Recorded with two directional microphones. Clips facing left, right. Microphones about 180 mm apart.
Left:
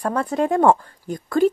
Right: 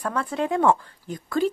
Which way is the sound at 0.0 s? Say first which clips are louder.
Left 5 dB; 45° left (ahead or behind).